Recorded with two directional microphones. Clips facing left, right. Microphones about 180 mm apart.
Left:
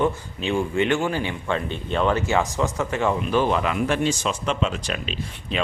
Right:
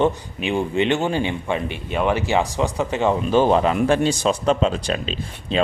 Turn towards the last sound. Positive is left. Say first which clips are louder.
# right 3 dB
turn(degrees=-30)  # may be behind; listen again after turning